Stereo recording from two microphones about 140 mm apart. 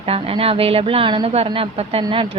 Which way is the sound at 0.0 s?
45° right (ahead or behind).